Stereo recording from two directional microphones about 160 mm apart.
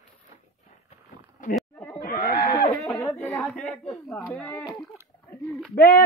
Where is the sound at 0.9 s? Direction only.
55° left (ahead or behind).